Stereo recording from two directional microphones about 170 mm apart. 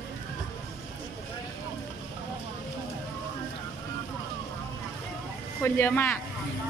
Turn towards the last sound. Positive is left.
turn(degrees=10)  # may be behind; listen again after turning